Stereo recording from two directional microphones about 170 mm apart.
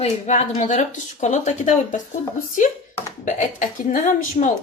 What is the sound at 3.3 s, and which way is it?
Speech, 50° left (ahead or behind).